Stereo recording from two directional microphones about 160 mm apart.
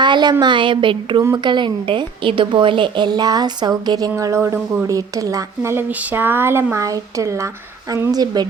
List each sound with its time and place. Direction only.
0.0 s a woman's voice: 30° right (ahead or behind)